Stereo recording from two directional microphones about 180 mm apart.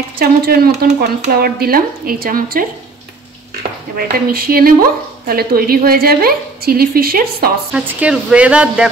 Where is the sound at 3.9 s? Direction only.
55° right (ahead or behind).